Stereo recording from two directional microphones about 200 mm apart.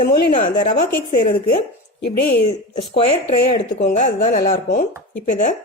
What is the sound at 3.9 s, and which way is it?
A woman's voice, 40° left (ahead or behind).